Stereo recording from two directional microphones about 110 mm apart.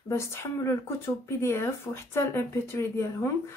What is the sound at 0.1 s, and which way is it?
Speech, 25° left (ahead or behind).